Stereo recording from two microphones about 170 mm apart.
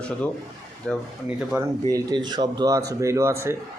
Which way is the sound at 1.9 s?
25° right (ahead or behind).